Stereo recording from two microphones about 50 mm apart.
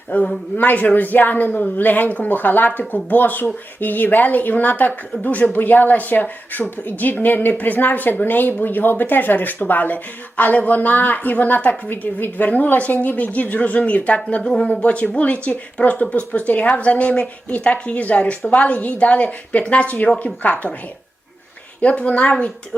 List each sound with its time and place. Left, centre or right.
0.1 s speech: left
14.4 s speech: centre
14.7 s speech: left
21.8 s speech: left